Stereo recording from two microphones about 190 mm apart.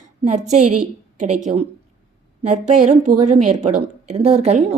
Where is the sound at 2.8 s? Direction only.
40° right (ahead or behind).